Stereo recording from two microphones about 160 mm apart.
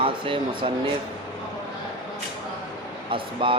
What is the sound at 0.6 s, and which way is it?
Speech, 35° right (ahead or behind).